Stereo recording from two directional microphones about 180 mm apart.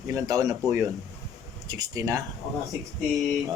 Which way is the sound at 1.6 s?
20° right (ahead or behind).